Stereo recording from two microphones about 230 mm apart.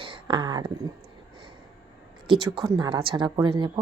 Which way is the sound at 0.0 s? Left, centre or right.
Right.